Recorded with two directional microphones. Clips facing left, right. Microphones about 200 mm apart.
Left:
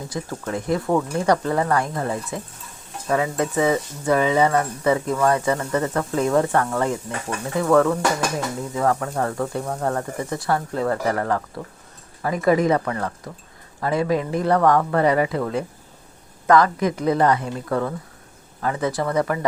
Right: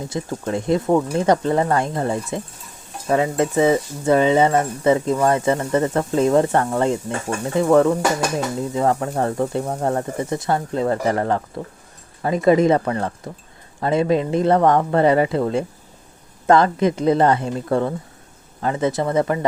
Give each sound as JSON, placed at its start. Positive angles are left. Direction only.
{"t": 0.1, "sound": "speech", "side_deg": -25}